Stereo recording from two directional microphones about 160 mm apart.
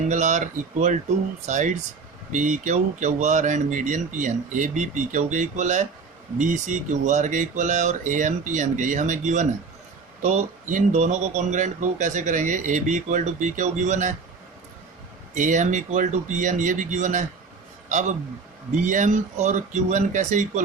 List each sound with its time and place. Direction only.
0.1 s speech: 50° right (ahead or behind)
15.4 s speech: 50° right (ahead or behind)
18.7 s speech: 50° right (ahead or behind)